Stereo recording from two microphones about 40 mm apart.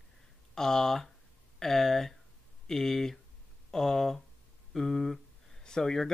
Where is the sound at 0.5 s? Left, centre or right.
Centre.